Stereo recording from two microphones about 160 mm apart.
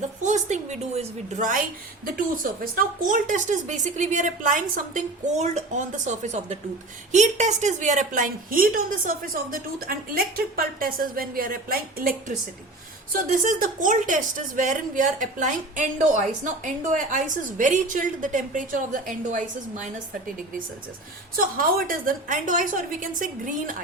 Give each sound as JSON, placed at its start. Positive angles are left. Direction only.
{"t": 0.3, "sound": "a woman's voice", "side_deg": -50}
{"t": 2.1, "sound": "a woman's voice", "side_deg": -60}
{"t": 13.1, "sound": "a woman's voice", "side_deg": -60}
{"t": 21.3, "sound": "a woman's voice", "side_deg": -65}